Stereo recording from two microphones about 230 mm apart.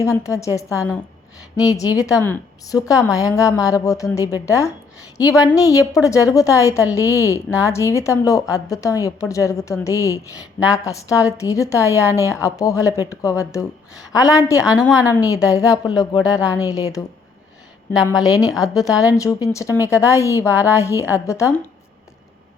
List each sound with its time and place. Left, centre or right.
0.0 s a woman's voice: centre
5.3 s a woman's voice: centre
5.5 s a woman's voice: centre
18.4 s a woman's voice: centre
18.7 s a woman's voice: centre